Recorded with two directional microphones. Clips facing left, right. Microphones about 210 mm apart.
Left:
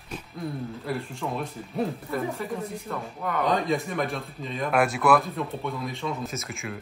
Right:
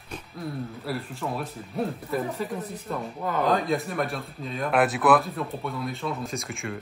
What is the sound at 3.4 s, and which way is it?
Speech, centre (ahead or behind).